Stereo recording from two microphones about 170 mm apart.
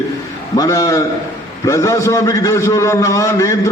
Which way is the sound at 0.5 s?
20° left (ahead or behind).